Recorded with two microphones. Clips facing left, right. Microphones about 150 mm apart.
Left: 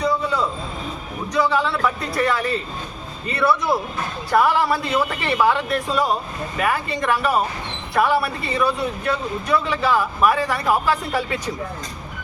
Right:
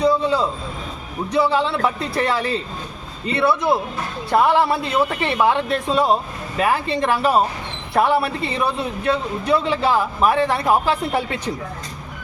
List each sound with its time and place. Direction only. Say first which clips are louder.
0.0 s vehicle: right 4 dB; 30° right (ahead or behind)
1.3 s speech: right 2 dB; 30° right (ahead or behind)
4.3 s speech: right 2 dB; 25° right (ahead or behind)